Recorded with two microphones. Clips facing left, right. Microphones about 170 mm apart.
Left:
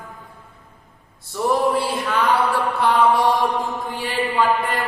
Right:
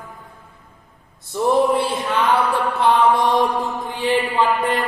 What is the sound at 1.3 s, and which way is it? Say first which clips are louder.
Male singing: right 3 dB; 20° right (ahead or behind).